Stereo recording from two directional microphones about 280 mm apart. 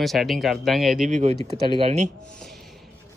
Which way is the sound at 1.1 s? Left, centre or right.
Right.